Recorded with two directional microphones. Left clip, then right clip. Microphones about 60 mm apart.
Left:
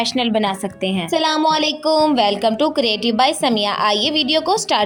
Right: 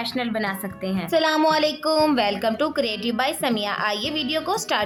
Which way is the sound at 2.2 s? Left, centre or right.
Left.